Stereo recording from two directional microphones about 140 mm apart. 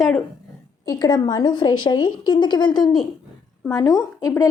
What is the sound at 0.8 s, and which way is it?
A woman's voice, 25° left (ahead or behind).